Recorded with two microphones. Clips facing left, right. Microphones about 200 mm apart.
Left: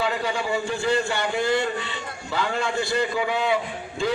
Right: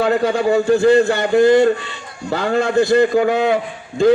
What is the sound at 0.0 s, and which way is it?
A man's voice, 45° right (ahead or behind).